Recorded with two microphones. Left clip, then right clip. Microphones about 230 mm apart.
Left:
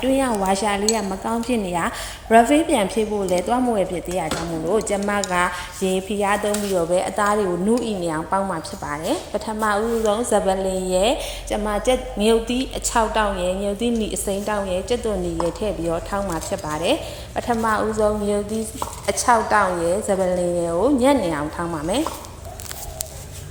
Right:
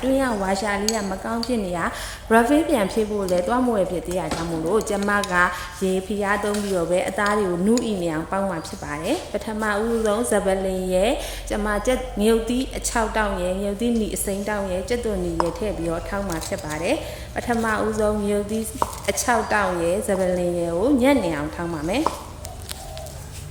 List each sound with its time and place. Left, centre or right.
0.0 s a woman's voice: centre